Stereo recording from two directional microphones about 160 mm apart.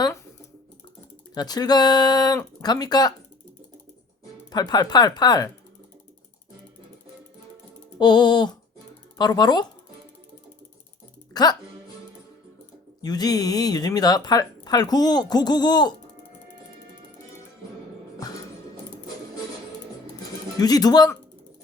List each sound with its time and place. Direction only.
1.3 s speech: 25° left (ahead or behind)
4.5 s speech: 25° left (ahead or behind)
7.9 s speech: 25° left (ahead or behind)
11.3 s speech: 25° left (ahead or behind)
13.0 s speech: 25° left (ahead or behind)
20.6 s speech: 25° left (ahead or behind)